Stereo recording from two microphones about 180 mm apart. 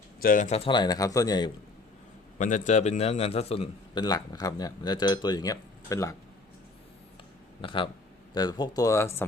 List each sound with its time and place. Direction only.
0.2 s speech: 50° left (ahead or behind); by 1.5 s 20° left (ahead or behind)
2.4 s a man's voice: 40° left (ahead or behind)
4.0 s speech: 20° left (ahead or behind)
7.6 s speech: 30° left (ahead or behind)